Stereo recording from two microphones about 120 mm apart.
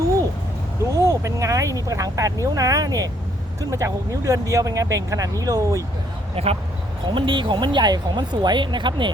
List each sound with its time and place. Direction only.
0.9 s speech: 25° right (ahead or behind)
6.3 s speech: 55° right (ahead or behind)
7.0 s speech: 45° right (ahead or behind)